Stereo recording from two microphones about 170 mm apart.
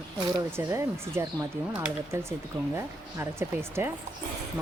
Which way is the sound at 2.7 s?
15° right (ahead or behind).